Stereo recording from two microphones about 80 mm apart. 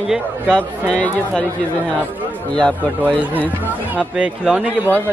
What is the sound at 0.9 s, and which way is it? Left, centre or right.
Speech, centre.